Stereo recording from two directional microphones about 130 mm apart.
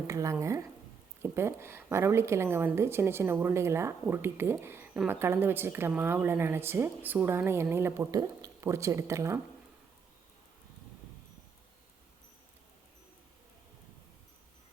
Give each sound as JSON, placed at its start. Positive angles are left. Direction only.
{"t": 0.1, "sound": "a woman's voice", "side_deg": -25}